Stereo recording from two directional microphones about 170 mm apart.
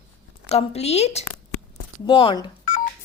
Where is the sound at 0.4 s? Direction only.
40° left (ahead or behind).